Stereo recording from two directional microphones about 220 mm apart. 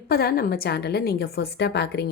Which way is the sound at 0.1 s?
45° left (ahead or behind).